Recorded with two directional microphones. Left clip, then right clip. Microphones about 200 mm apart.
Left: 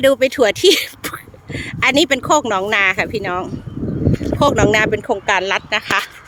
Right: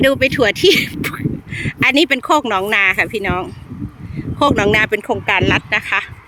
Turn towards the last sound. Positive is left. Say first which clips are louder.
# right 1 dB
turn(degrees=0)  # may be behind; listen again after turning